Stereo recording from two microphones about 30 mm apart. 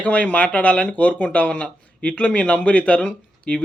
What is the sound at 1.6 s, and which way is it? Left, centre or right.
Speech, left.